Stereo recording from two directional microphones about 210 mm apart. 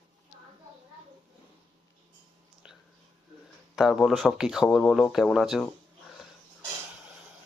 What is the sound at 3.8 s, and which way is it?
Speech, centre (ahead or behind).